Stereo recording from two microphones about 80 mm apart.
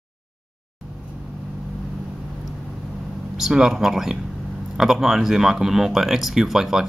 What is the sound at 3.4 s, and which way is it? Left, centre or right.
Speech, centre.